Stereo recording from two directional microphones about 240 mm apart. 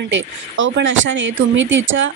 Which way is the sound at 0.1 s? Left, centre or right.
Right.